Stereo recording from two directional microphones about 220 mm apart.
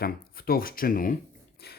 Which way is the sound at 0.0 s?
40° left (ahead or behind).